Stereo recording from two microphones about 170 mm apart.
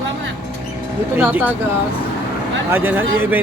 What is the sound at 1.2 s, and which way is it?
Speech, 10° right (ahead or behind).